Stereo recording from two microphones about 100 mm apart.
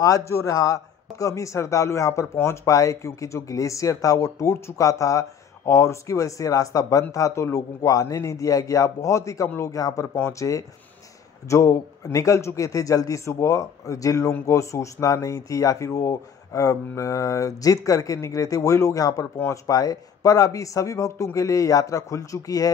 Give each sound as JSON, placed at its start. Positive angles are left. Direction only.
{"t": 0.3, "sound": "speech", "side_deg": 35}